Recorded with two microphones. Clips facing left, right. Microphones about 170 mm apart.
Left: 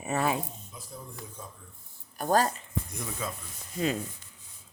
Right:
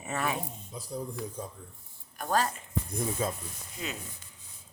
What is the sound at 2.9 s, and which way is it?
Speech, 30° right (ahead or behind).